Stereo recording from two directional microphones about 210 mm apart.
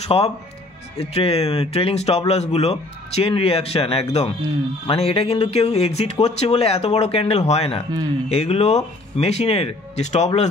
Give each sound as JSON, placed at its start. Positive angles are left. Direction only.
{"t": 0.1, "sound": "speech", "side_deg": 25}